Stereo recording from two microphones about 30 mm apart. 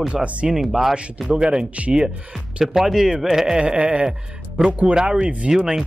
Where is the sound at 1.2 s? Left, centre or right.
Right.